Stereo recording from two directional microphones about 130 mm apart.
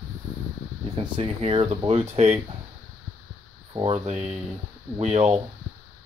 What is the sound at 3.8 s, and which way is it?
Speech, 55° right (ahead or behind).